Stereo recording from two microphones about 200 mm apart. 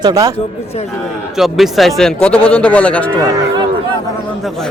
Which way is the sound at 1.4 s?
Centre (ahead or behind).